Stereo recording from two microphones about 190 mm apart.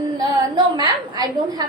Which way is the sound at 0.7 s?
20° right (ahead or behind).